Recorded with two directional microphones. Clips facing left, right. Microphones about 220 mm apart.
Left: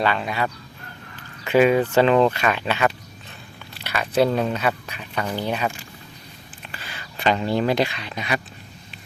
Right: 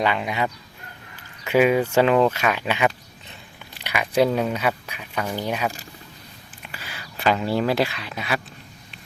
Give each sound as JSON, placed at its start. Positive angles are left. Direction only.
{"t": 0.0, "sound": "speech", "side_deg": -15}